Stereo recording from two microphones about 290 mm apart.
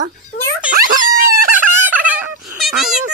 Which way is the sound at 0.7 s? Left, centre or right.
Right.